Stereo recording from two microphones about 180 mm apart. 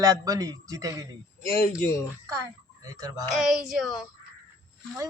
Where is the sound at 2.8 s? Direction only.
20° right (ahead or behind).